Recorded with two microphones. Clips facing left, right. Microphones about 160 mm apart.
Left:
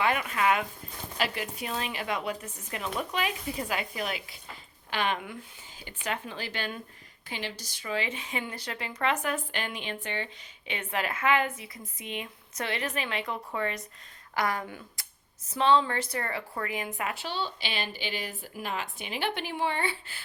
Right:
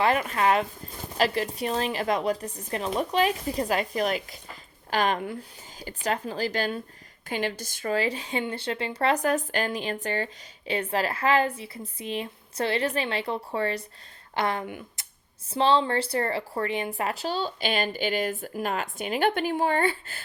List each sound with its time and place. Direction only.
0.0 s speech: 35° right (ahead or behind)
7.3 s speech: 50° right (ahead or behind); by 14.8 s 25° right (ahead or behind)
15.0 s a sound: 20° right (ahead or behind)
15.4 s speech: 30° right (ahead or behind); by 20.2 s 45° right (ahead or behind)